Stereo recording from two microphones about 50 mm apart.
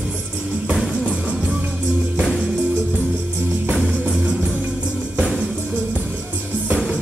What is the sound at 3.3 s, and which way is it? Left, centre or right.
Music, right.